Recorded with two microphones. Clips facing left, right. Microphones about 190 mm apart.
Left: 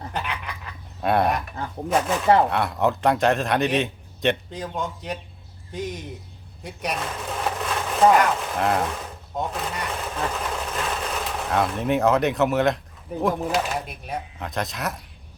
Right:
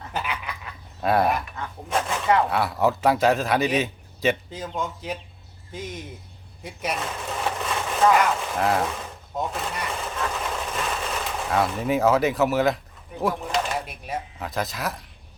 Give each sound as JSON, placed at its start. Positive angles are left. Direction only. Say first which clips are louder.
{"t": 0.1, "sound": "a sound", "louder": "right 2 dB", "side_deg": 0}
{"t": 1.6, "sound": "speech", "louder": "left 2 dB", "side_deg": 35}
{"t": 2.5, "sound": "a man's voice", "louder": "even", "side_deg": -5}
{"t": 6.6, "sound": "sewing machine", "louder": "even", "side_deg": 0}
{"t": 13.2, "sound": "a man's voice", "louder": "left 2 dB", "side_deg": 5}